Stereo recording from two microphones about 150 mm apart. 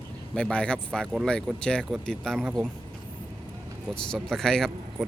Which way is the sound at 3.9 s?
5° left (ahead or behind).